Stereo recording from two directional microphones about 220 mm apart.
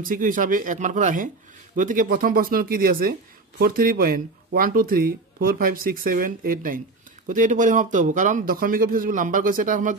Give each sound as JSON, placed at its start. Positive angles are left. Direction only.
{"t": 0.1, "sound": "speech", "side_deg": -40}